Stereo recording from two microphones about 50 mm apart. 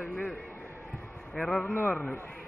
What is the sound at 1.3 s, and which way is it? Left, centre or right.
Speech, centre.